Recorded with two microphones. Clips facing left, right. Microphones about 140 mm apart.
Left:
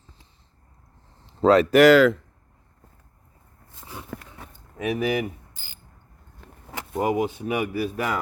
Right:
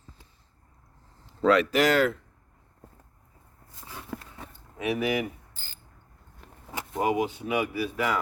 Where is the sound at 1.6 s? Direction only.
65° left (ahead or behind); by 2.2 s 90° left.